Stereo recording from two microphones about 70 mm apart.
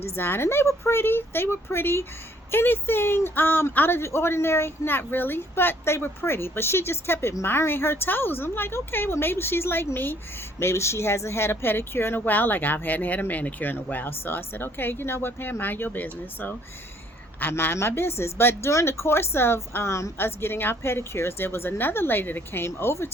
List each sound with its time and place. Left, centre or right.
0.2 s a woman's voice: left